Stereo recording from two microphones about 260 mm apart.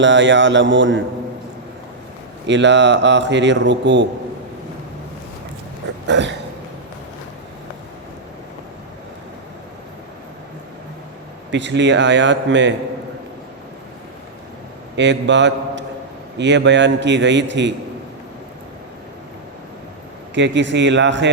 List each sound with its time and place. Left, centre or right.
0.0 s speech: right
2.5 s speech: right
6.1 s speech: right
11.5 s speech: right
14.9 s speech: right
20.3 s speech: right